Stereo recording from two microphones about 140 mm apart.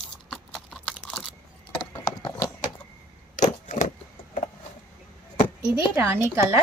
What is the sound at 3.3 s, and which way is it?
Vehicle, 60° left (ahead or behind).